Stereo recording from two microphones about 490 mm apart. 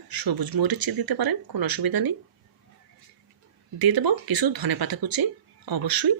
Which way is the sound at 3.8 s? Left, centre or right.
Right.